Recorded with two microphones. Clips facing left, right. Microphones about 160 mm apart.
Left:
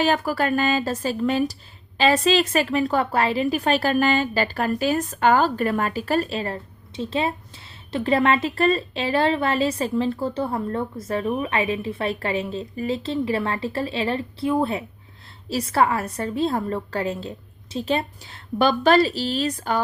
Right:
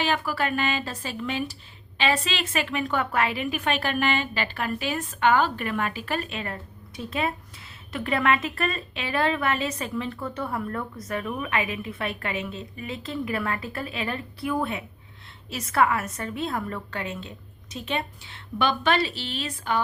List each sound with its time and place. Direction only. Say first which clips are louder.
0.0 s speech: left 5 dB; 40° left (ahead or behind)